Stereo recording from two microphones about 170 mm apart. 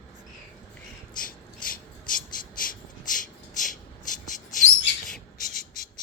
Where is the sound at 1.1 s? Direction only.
55° left (ahead or behind).